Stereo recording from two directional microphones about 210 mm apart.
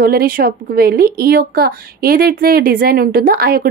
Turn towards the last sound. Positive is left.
turn(degrees=-45)  # may be behind; listen again after turning